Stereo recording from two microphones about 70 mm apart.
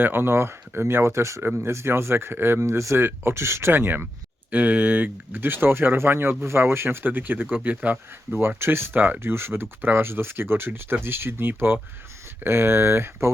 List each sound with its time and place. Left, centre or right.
0.0 s speech: right
8.4 s speech: right